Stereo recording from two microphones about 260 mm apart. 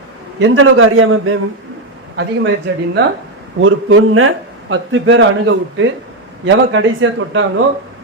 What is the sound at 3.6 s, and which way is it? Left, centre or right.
Speech, right.